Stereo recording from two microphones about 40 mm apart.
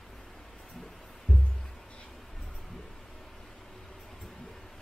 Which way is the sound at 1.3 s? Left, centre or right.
Left.